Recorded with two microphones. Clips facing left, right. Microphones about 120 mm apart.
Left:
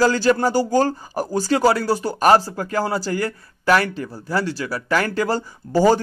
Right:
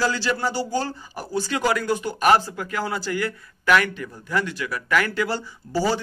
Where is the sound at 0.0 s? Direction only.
45° left (ahead or behind).